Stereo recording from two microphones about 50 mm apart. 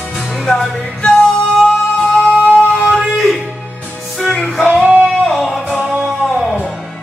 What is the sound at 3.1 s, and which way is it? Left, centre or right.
Music, centre.